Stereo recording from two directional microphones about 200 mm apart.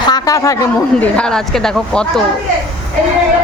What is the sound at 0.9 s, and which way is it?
Speech, 5° left (ahead or behind).